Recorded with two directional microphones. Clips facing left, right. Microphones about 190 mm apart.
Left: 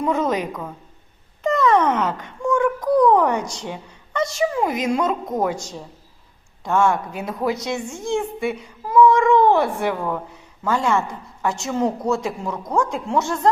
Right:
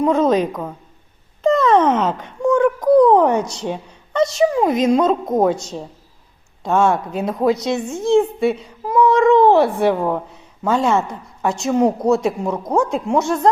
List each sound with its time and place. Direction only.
0.0 s a woman's voice: 20° right (ahead or behind)
1.6 s a sound: 20° right (ahead or behind)
3.7 s a woman's voice: 20° right (ahead or behind)
6.7 s a woman's voice: 20° right (ahead or behind)